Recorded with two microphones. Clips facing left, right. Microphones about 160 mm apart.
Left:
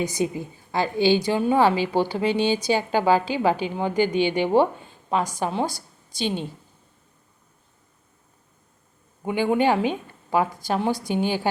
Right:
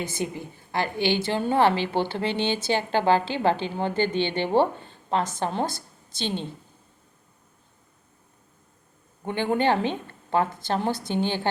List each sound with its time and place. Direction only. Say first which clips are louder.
0.0 s a woman's voice: left 5 dB; 15° left (ahead or behind)
9.2 s a woman's voice: left 3 dB; 10° left (ahead or behind)